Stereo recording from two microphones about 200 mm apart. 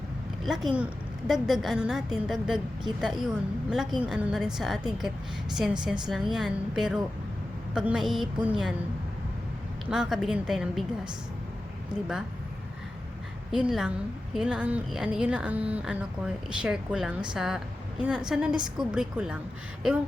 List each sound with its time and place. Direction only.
0.4 s a woman's voice: centre (ahead or behind)
9.9 s a woman's voice: centre (ahead or behind)
13.5 s a woman's voice: centre (ahead or behind)